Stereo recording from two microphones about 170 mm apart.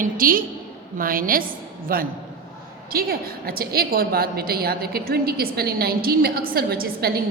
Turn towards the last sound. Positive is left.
turn(degrees=-65)  # may be behind; listen again after turning